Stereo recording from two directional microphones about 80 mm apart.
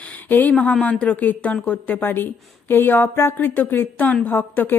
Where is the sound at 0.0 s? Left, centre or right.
Left.